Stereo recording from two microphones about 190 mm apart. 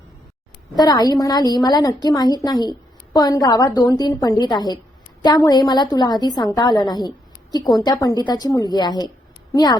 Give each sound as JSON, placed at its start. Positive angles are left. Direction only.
{"t": 0.8, "sound": "a woman's voice", "side_deg": 20}